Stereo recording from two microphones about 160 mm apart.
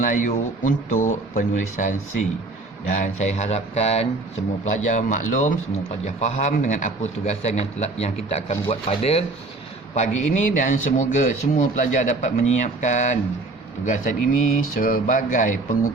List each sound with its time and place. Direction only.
0.0 s speech: 55° left (ahead or behind)